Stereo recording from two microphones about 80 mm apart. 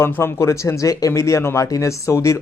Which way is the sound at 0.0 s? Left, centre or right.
Left.